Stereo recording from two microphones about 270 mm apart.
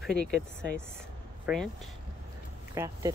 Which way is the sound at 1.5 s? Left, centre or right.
Centre.